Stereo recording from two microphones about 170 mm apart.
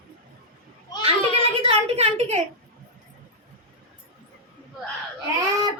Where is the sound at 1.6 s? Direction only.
35° right (ahead or behind).